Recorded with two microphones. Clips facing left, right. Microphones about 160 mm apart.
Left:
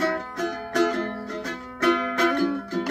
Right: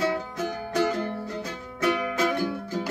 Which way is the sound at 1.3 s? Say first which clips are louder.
Left 2 dB; 10° right (ahead or behind).